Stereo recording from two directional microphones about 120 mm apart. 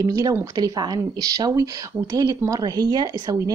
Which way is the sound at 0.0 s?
30° right (ahead or behind).